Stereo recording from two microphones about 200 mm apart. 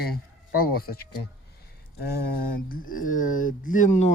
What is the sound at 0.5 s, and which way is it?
Speech, 50° left (ahead or behind).